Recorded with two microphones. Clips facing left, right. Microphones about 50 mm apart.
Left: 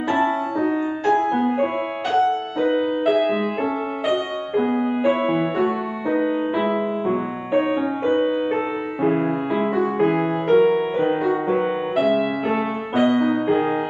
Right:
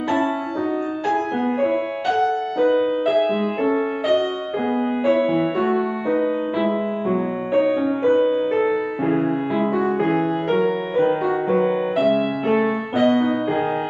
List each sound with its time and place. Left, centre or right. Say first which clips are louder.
1.3 s music: left 1 dB; centre
2.6 s music: right 2 dB; left
5.2 s music: right 1 dB; left
9.0 s music: left 3 dB; centre
12.9 s music: even; centre
13.2 s music: left 1 dB; centre